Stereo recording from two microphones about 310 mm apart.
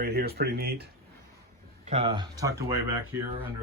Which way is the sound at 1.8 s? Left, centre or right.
Centre.